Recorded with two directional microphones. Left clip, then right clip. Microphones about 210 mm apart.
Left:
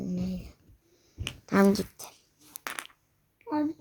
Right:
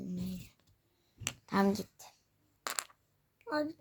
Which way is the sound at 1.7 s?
5° left (ahead or behind).